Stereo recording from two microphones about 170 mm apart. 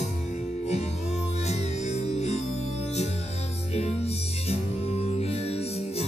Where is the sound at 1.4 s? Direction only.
40° left (ahead or behind).